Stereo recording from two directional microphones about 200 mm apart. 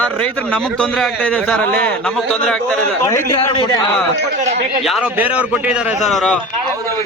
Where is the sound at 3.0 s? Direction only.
15° left (ahead or behind).